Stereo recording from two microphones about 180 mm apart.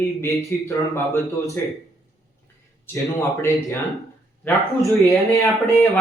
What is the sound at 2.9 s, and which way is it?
Speech, 15° left (ahead or behind).